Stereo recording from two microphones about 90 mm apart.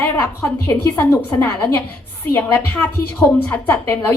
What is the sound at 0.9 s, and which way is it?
Speech, 15° left (ahead or behind).